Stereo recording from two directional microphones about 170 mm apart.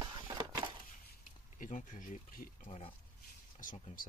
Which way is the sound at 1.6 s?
50° left (ahead or behind).